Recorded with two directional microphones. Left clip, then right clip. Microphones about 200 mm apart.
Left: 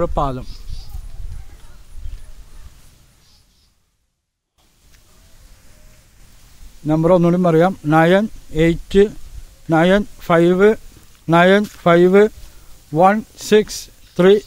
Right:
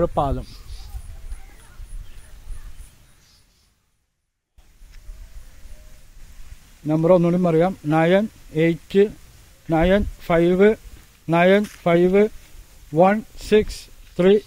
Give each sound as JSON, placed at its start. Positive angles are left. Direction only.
{"t": 0.0, "sound": "speech", "side_deg": 0}
{"t": 6.9, "sound": "speech", "side_deg": 15}